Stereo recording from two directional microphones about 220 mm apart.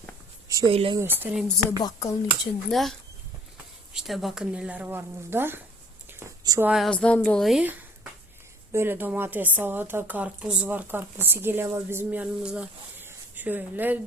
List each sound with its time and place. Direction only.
0.4 s speech: 15° right (ahead or behind)
0.9 s speech: 10° right (ahead or behind)
1.8 s speech: 15° left (ahead or behind)
2.6 s speech: centre (ahead or behind)
3.9 s speech: centre (ahead or behind)